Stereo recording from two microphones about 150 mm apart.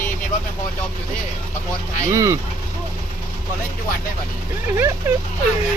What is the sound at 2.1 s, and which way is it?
Speech, 20° right (ahead or behind).